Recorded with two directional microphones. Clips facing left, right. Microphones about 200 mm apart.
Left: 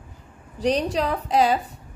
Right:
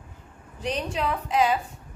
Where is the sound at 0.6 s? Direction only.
35° left (ahead or behind).